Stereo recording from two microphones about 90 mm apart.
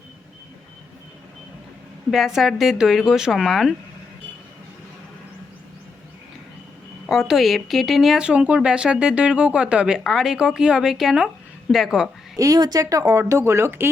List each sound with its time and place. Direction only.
2.0 s speech: 5° right (ahead or behind)
7.1 s speech: centre (ahead or behind)
12.4 s speech: 45° right (ahead or behind); by 13.9 s 25° right (ahead or behind)